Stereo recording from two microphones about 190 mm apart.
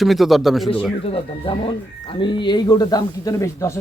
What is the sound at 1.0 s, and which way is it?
Speech, 30° left (ahead or behind).